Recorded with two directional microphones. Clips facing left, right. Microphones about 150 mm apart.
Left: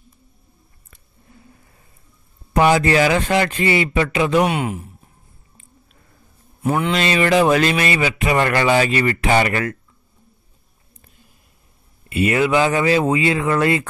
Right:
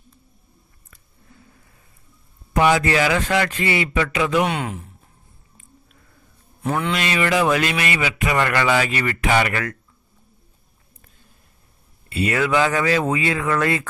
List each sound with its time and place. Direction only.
2.5 s speech: 35° left (ahead or behind)
4.5 s speech: 15° left (ahead or behind)
6.7 s speech: 25° left (ahead or behind)
12.1 s speech: 20° left (ahead or behind)